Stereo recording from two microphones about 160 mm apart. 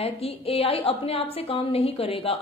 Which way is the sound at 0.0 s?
35° left (ahead or behind).